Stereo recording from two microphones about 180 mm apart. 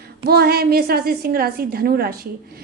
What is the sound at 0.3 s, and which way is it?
A woman's voice, 60° right (ahead or behind).